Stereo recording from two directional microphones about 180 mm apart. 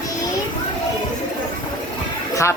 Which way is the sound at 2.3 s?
15° left (ahead or behind).